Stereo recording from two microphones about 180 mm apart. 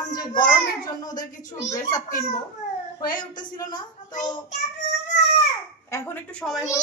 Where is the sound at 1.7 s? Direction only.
15° left (ahead or behind).